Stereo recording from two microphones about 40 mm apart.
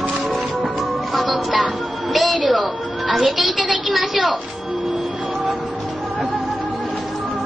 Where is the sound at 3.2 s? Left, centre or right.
Centre.